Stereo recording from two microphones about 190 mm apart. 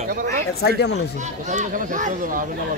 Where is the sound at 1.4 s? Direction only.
40° right (ahead or behind).